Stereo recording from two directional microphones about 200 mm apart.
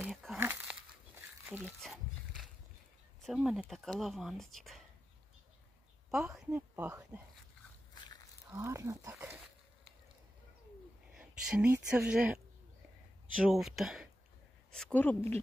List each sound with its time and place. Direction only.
0.0 s crumpling: centre (ahead or behind)
1.6 s a sound: 5° left (ahead or behind)
3.2 s speech: centre (ahead or behind)
6.0 s a woman's voice: centre (ahead or behind)
7.9 s a sound: 20° left (ahead or behind)
8.5 s speech: 15° right (ahead or behind)
11.1 s speech: 5° right (ahead or behind)
13.5 s a woman's voice: centre (ahead or behind)